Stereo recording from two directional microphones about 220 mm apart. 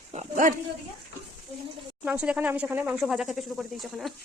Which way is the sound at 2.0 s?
5° right (ahead or behind).